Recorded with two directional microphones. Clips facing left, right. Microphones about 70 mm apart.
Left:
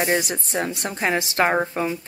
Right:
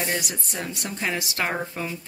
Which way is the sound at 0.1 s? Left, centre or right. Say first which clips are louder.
Left 7 dB; left.